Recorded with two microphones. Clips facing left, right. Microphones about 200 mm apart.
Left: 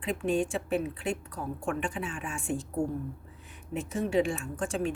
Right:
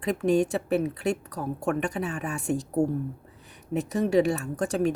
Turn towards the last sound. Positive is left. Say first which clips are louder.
# right 5 dB
turn(degrees=-40)  # may be behind; listen again after turning